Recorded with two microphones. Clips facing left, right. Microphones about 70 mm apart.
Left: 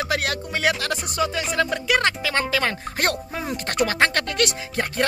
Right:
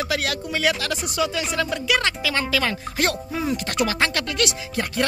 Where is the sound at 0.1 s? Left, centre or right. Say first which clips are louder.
Even; left.